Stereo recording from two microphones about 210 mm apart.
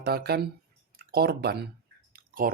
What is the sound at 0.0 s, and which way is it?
Speech, 50° right (ahead or behind).